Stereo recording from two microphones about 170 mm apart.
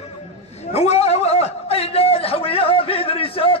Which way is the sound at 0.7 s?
40° left (ahead or behind).